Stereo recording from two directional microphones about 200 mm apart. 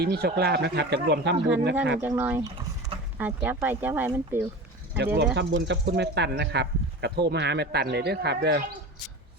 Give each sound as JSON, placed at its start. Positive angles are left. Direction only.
{"t": 0.0, "sound": "speech", "side_deg": -55}
{"t": 2.0, "sound": "speech", "side_deg": -10}
{"t": 5.1, "sound": "speech", "side_deg": -60}